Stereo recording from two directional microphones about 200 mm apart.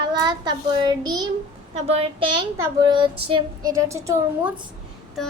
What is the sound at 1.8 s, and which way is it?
Speech, 30° right (ahead or behind).